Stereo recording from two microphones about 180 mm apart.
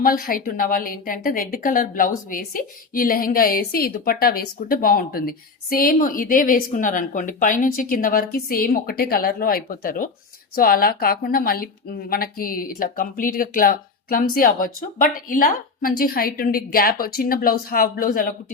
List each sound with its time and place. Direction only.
0.0 s a woman's voice: 50° left (ahead or behind)